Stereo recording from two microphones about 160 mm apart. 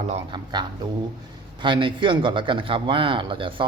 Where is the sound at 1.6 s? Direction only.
30° right (ahead or behind).